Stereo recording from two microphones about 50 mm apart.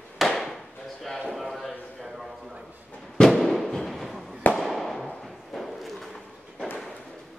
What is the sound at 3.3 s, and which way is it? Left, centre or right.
Fireworks, centre.